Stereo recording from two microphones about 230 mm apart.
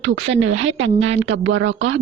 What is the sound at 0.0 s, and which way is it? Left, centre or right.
A woman's voice, right.